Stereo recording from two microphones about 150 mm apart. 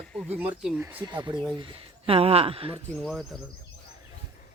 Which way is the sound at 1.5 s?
35° right (ahead or behind).